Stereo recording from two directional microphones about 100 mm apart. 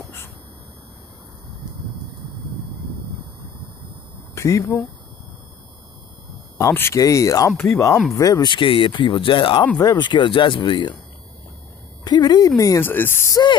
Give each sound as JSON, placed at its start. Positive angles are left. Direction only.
{"t": 4.4, "sound": "speech", "side_deg": 30}
{"t": 6.6, "sound": "speech", "side_deg": 25}
{"t": 7.5, "sound": "speech", "side_deg": 20}
{"t": 8.1, "sound": "speech", "side_deg": 35}
{"t": 8.5, "sound": "speech", "side_deg": 60}
{"t": 9.8, "sound": "speech", "side_deg": 45}
{"t": 12.0, "sound": "speech", "side_deg": 45}
{"t": 12.8, "sound": "speech", "side_deg": 20}